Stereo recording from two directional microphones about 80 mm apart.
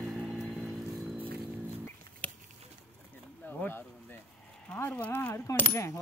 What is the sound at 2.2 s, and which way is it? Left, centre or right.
Patter, centre.